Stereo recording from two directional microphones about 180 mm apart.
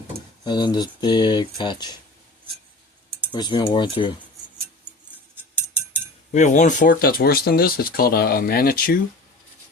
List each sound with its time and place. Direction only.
0.4 s speech: 25° left (ahead or behind)
3.3 s speech: 25° left (ahead or behind)
6.3 s speech: 45° left (ahead or behind)